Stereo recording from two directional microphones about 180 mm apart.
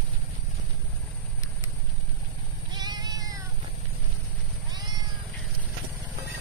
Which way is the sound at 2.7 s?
25° right (ahead or behind).